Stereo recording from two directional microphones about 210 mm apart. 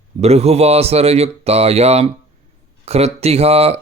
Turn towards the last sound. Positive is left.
turn(degrees=-30)  # may be behind; listen again after turning